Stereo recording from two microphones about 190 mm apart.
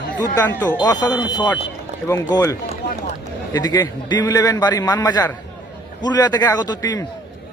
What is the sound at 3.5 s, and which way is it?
A man's voice, 20° left (ahead or behind).